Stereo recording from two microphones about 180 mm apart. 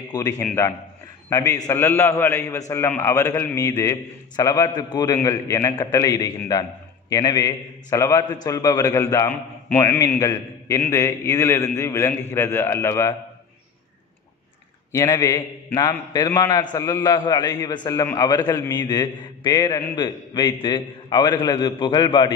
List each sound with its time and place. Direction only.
0.1 s a man's voice: 15° left (ahead or behind)
14.9 s a man's voice: 20° left (ahead or behind)